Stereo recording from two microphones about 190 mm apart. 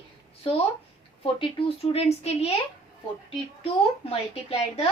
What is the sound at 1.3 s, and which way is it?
A woman's voice, 30° left (ahead or behind).